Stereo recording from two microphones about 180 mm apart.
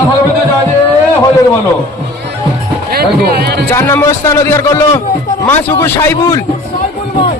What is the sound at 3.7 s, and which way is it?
A man's voice, 15° left (ahead or behind).